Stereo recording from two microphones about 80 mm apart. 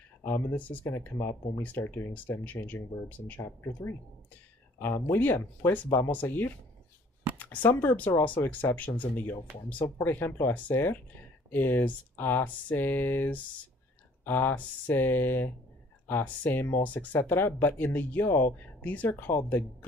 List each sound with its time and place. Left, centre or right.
0.2 s speech: left
3.4 s speech: left